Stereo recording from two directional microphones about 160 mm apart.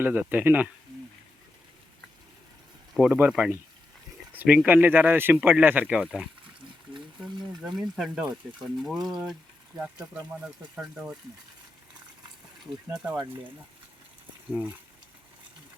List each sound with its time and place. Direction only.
0.0 s speech: 10° right (ahead or behind)
2.9 s speech: 5° right (ahead or behind)
6.9 s a sound: 35° right (ahead or behind)
7.6 s speech: centre (ahead or behind)
10.4 s speech: 5° right (ahead or behind)
12.9 s speech: 5° right (ahead or behind)
14.5 s speech: 10° right (ahead or behind)